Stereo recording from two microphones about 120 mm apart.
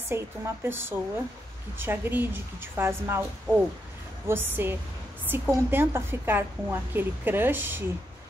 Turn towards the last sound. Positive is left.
turn(degrees=-15)  # may be behind; listen again after turning